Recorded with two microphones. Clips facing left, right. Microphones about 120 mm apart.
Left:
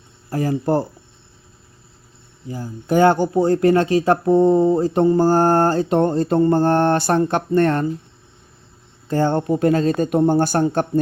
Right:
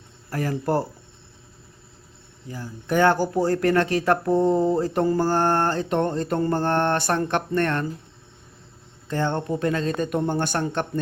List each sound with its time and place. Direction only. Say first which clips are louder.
0.3 s speech: left 5 dB; 25° left (ahead or behind)
2.5 s speech: left 5 dB; 30° left (ahead or behind)
4.8 s mantra: left 6 dB; 25° left (ahead or behind)
9.0 s mantra: left 6 dB; 35° left (ahead or behind)